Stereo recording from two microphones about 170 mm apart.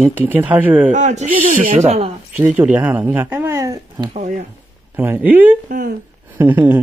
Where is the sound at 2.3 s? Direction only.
10° right (ahead or behind).